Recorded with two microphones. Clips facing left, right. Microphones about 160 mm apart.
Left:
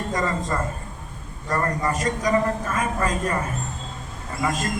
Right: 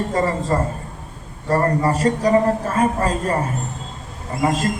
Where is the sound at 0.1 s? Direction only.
30° right (ahead or behind).